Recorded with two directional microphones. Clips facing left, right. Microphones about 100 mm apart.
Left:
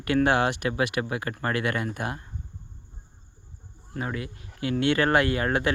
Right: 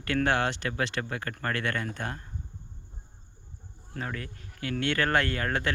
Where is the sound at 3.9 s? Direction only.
10° left (ahead or behind).